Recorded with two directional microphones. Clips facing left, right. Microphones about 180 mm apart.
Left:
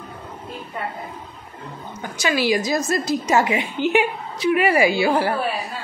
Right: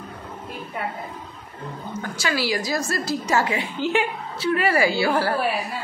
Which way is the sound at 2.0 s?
20° left (ahead or behind).